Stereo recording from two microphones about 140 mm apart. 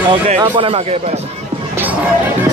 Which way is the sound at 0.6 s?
45° right (ahead or behind).